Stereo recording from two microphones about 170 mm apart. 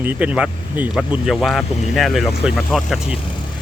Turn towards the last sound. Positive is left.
turn(degrees=-5)  # may be behind; listen again after turning